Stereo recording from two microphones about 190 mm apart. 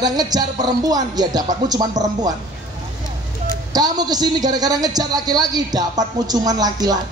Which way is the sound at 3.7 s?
20° right (ahead or behind).